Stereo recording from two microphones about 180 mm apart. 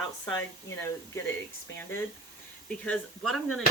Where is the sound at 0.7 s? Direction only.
15° left (ahead or behind).